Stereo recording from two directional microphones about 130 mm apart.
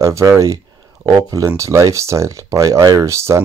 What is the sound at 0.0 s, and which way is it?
Speech, 25° right (ahead or behind).